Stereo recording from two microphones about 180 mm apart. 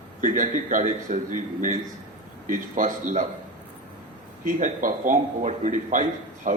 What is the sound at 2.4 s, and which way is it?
Speech, 45° right (ahead or behind).